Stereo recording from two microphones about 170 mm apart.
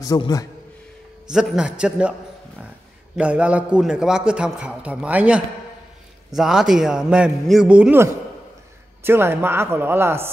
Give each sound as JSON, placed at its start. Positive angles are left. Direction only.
{"t": 0.0, "sound": "a man's voice", "side_deg": 20}
{"t": 1.3, "sound": "a man's voice", "side_deg": -5}
{"t": 3.2, "sound": "a man's voice", "side_deg": -5}